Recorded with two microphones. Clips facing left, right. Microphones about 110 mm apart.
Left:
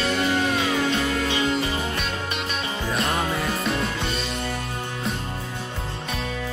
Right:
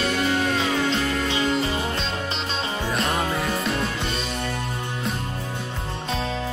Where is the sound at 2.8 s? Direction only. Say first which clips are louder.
Even; centre (ahead or behind).